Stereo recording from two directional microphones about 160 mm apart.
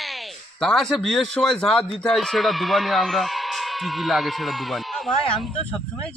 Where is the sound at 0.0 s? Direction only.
Centre (ahead or behind).